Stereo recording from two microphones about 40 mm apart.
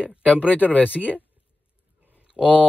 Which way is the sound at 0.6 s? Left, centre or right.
Right.